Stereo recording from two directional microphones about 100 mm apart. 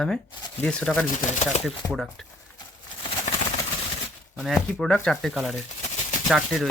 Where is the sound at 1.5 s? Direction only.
90° left.